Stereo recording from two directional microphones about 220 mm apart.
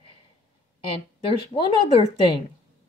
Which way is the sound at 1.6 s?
25° left (ahead or behind).